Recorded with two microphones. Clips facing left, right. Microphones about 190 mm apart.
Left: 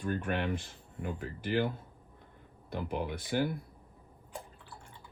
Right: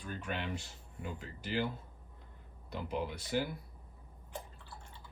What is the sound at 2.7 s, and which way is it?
Speech, 55° left (ahead or behind).